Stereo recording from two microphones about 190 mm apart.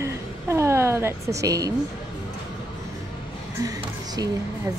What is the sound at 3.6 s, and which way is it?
Music, 20° right (ahead or behind).